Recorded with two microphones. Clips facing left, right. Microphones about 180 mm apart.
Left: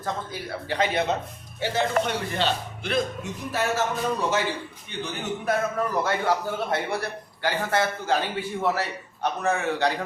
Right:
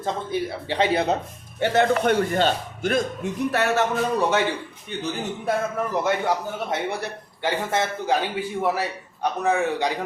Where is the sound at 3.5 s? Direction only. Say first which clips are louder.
Right 3 dB; 65° right (ahead or behind).